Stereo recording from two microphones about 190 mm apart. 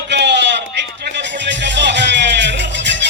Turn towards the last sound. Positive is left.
turn(degrees=-70)  # may be behind; listen again after turning